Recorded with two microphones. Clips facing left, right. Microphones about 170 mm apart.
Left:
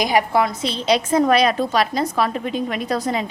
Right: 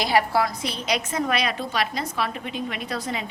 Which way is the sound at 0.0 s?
15° left (ahead or behind).